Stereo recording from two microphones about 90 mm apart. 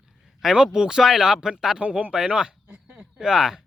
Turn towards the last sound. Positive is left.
turn(degrees=-5)  # may be behind; listen again after turning